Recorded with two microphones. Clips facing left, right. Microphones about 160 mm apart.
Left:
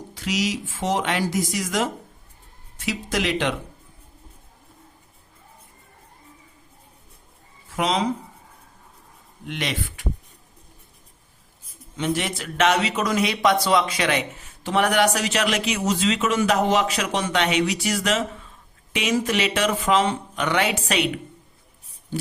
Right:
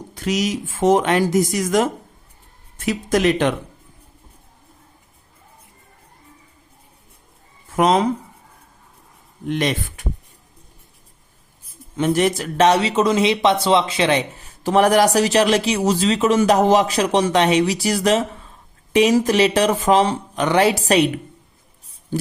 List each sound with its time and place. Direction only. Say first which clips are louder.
0.1 s speech: right 4 dB; 50° right (ahead or behind)
7.7 s speech: right 7 dB; 50° right (ahead or behind)
9.5 s speech: right 7 dB; 45° right (ahead or behind)
11.9 s speech: right 7 dB; 45° right (ahead or behind)
22.1 s a sound: right 7 dB; 45° right (ahead or behind)